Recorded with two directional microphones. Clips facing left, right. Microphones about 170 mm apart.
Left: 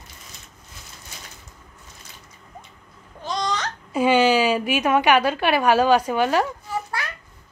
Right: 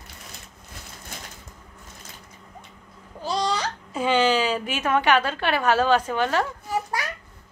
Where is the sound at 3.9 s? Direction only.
10° left (ahead or behind).